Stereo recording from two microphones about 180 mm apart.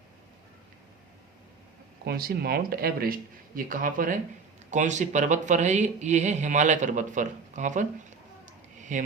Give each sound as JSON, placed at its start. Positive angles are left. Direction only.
{"t": 2.0, "sound": "speech", "side_deg": -55}
{"t": 8.9, "sound": "speech", "side_deg": -45}